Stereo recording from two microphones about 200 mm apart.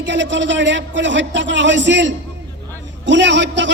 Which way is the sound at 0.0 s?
65° right (ahead or behind).